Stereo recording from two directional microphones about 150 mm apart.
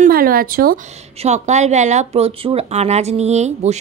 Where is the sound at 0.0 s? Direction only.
75° right (ahead or behind).